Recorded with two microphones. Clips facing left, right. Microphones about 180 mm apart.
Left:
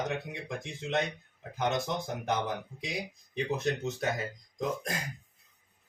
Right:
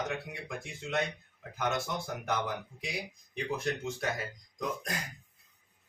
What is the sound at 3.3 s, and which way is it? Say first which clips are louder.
Speech: left 3 dB; 25° left (ahead or behind).